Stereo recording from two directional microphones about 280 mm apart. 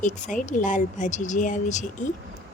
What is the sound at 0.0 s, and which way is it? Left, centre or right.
Speech, left.